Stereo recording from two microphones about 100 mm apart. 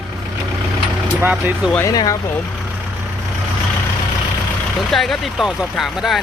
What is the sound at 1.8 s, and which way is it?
Speech, 35° left (ahead or behind).